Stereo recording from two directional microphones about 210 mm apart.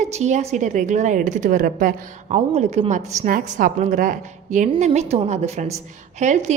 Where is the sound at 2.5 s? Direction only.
30° right (ahead or behind).